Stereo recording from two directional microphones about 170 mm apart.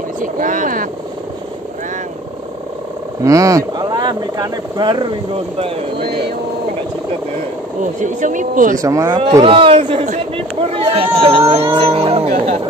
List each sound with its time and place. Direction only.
0.2 s speech: 50° right (ahead or behind)
3.3 s speech: 20° right (ahead or behind)
5.9 s a sound: 70° right (ahead or behind)
7.8 s speech: 45° right (ahead or behind)
8.7 s speech: 20° right (ahead or behind)
9.4 s speech: 30° right (ahead or behind)